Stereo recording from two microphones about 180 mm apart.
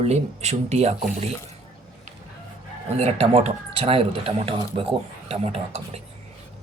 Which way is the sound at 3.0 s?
35° right (ahead or behind).